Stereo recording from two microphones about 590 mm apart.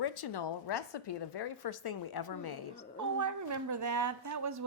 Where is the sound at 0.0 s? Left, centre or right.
Left.